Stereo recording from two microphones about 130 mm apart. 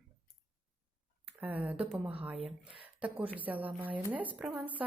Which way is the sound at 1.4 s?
15° right (ahead or behind).